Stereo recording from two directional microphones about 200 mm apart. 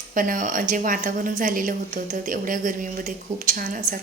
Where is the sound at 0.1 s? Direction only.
45° right (ahead or behind).